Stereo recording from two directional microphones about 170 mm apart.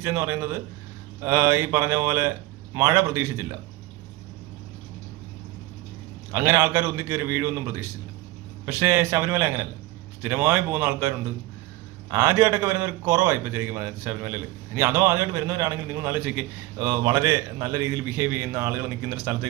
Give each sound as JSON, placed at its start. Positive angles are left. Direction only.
{"t": 0.0, "sound": "a man's voice", "side_deg": -15}
{"t": 6.3, "sound": "a man's voice", "side_deg": -15}